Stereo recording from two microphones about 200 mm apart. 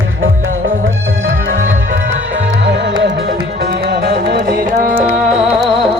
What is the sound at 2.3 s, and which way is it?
Music, 60° right (ahead or behind).